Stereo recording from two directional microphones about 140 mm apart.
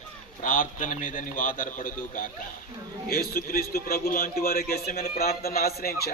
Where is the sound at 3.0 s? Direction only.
90° left.